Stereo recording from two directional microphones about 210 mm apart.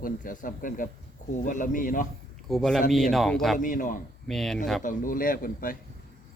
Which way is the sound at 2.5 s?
Centre (ahead or behind).